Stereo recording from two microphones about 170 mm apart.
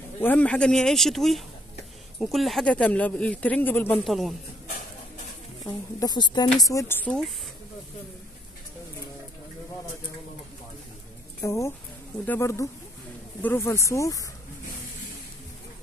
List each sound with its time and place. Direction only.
0.2 s speech: 10° left (ahead or behind)
4.0 s speech: centre (ahead or behind)
5.9 s speech: 25° left (ahead or behind); by 7.2 s 10° left (ahead or behind)
11.4 s speech: 15° left (ahead or behind)